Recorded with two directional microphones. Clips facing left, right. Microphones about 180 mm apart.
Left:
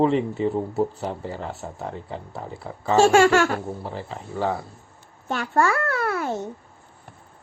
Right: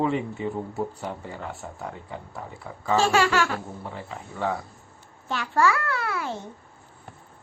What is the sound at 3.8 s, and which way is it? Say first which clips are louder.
Speech: left 4 dB; 30° left (ahead or behind).